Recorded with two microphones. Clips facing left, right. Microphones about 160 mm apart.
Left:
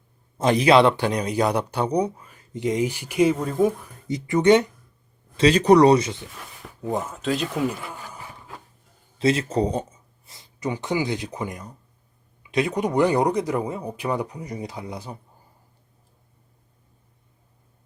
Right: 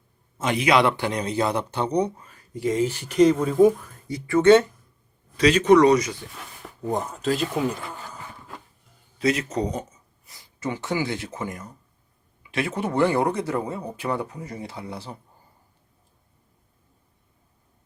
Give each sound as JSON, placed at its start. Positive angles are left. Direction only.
{"t": 0.3, "sound": "a man's voice", "side_deg": 35}
{"t": 2.4, "sound": "a man's voice", "side_deg": 20}
{"t": 3.3, "sound": "speech", "side_deg": 0}
{"t": 4.1, "sound": "a man's voice", "side_deg": 20}
{"t": 5.4, "sound": "speech", "side_deg": 35}
{"t": 6.8, "sound": "speech", "side_deg": 0}
{"t": 7.9, "sound": "a sound", "side_deg": 15}
{"t": 9.1, "sound": "a man's voice", "side_deg": 30}